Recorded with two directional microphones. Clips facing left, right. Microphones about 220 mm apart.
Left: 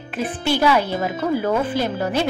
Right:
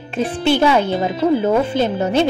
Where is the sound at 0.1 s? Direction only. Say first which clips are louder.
Right 5 dB; 25° right (ahead or behind).